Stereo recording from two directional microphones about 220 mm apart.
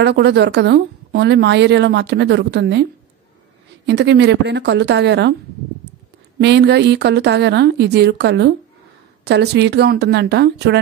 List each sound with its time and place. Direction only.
0.0 s speech: 50° right (ahead or behind)
6.4 s speech: 50° right (ahead or behind)